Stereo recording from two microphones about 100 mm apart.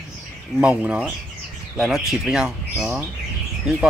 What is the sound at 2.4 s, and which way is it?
Speech, 20° right (ahead or behind).